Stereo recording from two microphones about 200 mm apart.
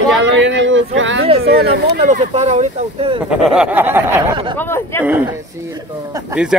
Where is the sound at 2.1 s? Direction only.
35° right (ahead or behind).